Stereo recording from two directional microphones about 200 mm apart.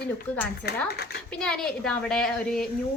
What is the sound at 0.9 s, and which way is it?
Speech, 55° left (ahead or behind).